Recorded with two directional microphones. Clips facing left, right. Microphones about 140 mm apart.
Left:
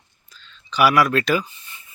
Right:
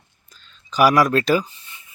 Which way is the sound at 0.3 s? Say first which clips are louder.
Right 2 dB; 45° right (ahead or behind).